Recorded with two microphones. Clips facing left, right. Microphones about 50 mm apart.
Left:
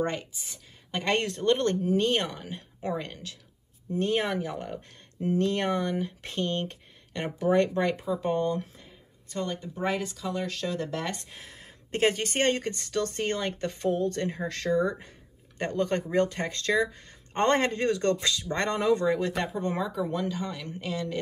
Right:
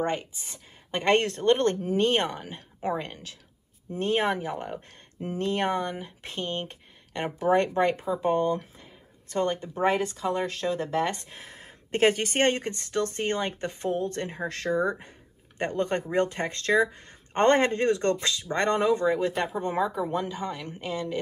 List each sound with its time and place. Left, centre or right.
0.5 s speech: right; by 8.8 s centre
9.3 s speech: right
18.9 s speech: centre